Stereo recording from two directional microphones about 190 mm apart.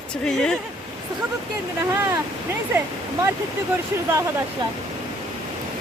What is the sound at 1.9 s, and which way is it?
Speech, 15° right (ahead or behind).